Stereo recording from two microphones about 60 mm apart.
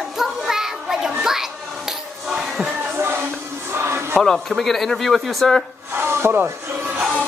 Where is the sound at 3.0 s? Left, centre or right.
Right.